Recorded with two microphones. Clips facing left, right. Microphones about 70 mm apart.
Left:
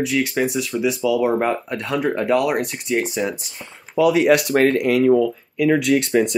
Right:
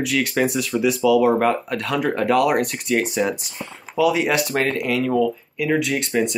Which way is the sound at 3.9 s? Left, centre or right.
Left.